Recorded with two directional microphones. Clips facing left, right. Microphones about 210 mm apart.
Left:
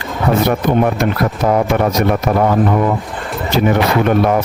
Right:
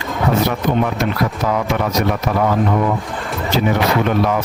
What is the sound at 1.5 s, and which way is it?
Speech, 45° left (ahead or behind).